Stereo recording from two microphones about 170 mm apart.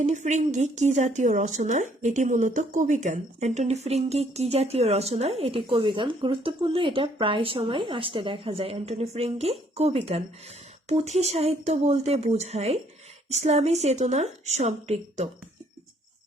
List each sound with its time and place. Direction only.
0.0 s speech: 45° right (ahead or behind)